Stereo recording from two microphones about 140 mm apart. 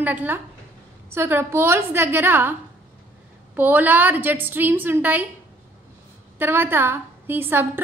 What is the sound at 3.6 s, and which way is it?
A woman's voice, 15° right (ahead or behind).